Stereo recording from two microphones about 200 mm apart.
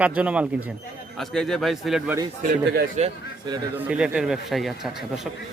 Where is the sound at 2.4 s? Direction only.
45° right (ahead or behind).